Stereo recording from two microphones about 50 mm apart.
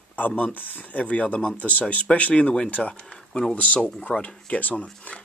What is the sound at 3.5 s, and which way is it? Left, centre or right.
Speech, left.